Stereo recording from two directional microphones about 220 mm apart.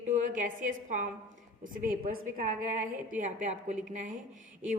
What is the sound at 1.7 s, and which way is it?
A man's voice, 40° right (ahead or behind).